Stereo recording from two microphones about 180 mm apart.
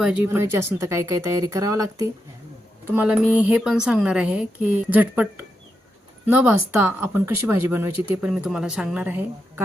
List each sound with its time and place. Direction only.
0.0 s speech: 10° right (ahead or behind)
2.9 s speech: 10° right (ahead or behind)